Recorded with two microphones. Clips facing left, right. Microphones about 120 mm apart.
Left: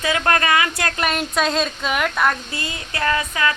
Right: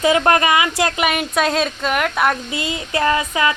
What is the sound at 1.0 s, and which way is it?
A woman's voice, 10° right (ahead or behind).